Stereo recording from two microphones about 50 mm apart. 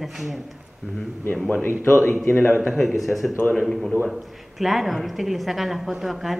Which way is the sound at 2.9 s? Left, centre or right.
Centre.